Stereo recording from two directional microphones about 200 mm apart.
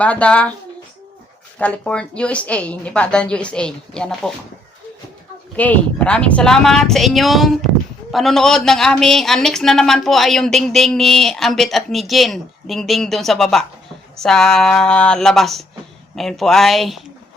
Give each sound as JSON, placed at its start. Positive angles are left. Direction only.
{"t": 0.0, "sound": "speech", "side_deg": 5}
{"t": 1.5, "sound": "a man's voice", "side_deg": 5}
{"t": 5.5, "sound": "a man's voice", "side_deg": 10}